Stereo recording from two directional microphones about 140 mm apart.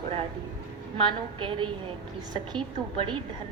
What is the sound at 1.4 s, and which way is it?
A woman's voice, 35° right (ahead or behind).